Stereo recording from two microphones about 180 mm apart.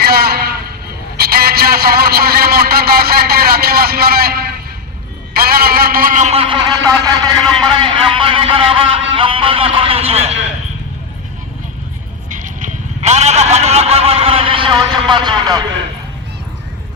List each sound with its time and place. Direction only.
0.0 s music: 60° right (ahead or behind)
1.1 s a man's voice: 60° right (ahead or behind); by 7.4 s 20° right (ahead or behind)
7.4 s a man's voice: 5° left (ahead or behind)
7.7 s a man's voice: 30° right (ahead or behind)
12.3 s a man's voice: 45° right (ahead or behind); by 15.6 s 25° right (ahead or behind)